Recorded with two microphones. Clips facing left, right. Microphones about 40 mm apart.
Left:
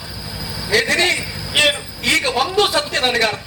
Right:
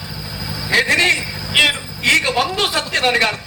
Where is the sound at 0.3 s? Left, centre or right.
Centre.